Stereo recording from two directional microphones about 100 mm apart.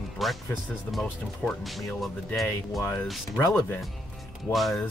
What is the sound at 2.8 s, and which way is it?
Speech, 25° left (ahead or behind).